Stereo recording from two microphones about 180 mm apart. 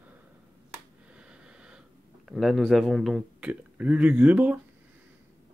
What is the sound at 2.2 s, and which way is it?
A man's voice, centre (ahead or behind).